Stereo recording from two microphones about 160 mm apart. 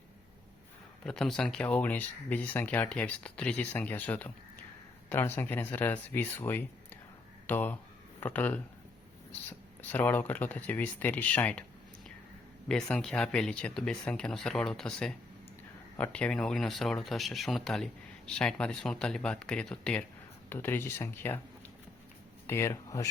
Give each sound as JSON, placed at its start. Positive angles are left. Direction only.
{"t": 1.0, "sound": "speech", "side_deg": 5}
{"t": 12.6, "sound": "speech", "side_deg": 5}
{"t": 22.4, "sound": "speech", "side_deg": 15}